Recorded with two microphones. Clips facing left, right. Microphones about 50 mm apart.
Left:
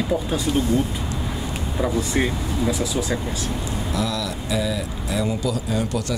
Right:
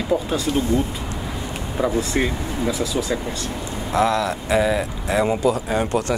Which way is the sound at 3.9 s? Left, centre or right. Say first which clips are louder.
Right 9 dB; right.